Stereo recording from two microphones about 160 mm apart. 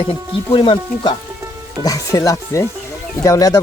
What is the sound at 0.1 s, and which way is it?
A man's voice, 30° left (ahead or behind).